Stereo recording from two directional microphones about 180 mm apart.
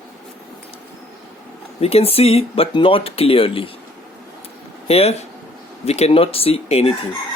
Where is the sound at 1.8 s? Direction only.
35° left (ahead or behind).